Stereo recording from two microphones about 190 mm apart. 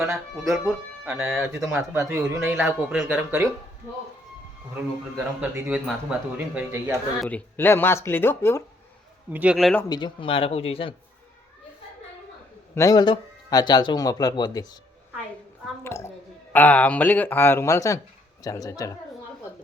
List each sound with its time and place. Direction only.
0.0 s speech: centre (ahead or behind)
5.4 s speech: 5° right (ahead or behind)
7.3 s speech: 10° left (ahead or behind)
9.3 s speech: 5° right (ahead or behind)
9.9 s a man's voice: 25° left (ahead or behind)
12.7 s a man's voice: 20° left (ahead or behind)
15.8 s a man's voice: 15° left (ahead or behind)